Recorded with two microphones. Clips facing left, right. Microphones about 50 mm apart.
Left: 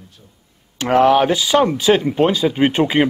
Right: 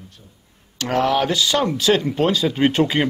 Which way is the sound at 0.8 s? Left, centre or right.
Left.